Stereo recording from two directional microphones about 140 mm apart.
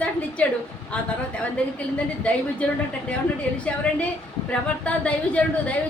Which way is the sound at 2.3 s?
10° left (ahead or behind).